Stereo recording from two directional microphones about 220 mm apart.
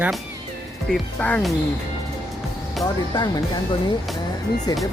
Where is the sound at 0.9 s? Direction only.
5° left (ahead or behind).